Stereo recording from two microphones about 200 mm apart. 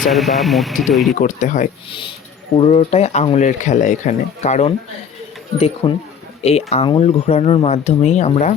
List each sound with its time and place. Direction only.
0.1 s speech: centre (ahead or behind)
1.2 s speech: 40° left (ahead or behind)